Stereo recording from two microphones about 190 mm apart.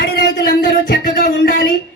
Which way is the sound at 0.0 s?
55° left (ahead or behind).